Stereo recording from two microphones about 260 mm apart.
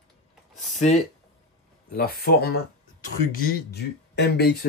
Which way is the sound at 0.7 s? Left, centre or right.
Left.